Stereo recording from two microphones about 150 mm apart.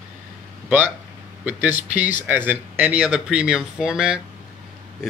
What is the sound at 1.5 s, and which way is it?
Speech, 10° right (ahead or behind).